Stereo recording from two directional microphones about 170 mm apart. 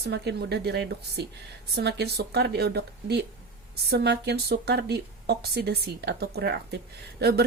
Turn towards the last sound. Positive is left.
turn(degrees=-70)  # may be behind; listen again after turning